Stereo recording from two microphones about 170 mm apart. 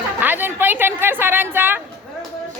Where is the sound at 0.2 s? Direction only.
10° right (ahead or behind).